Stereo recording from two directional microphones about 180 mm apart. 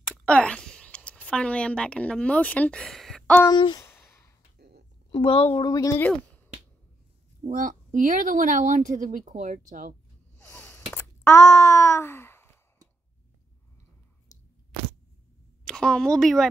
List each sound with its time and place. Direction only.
0.0 s a woman's voice: 5° left (ahead or behind)
3.4 s speech: 25° left (ahead or behind)
3.8 s sigh: 15° left (ahead or behind)
4.6 s a sound: 65° right (ahead or behind)
5.1 s a woman's voice: 30° left (ahead or behind)
5.6 s speech: 20° left (ahead or behind)
7.4 s speech: 45° right (ahead or behind)
10.3 s a sound: 10° left (ahead or behind)
14.3 s biting: 20° left (ahead or behind)
15.6 s speech: 5° left (ahead or behind)